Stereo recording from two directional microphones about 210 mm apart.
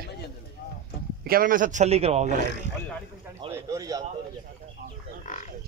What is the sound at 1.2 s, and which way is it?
A man's voice, 45° right (ahead or behind).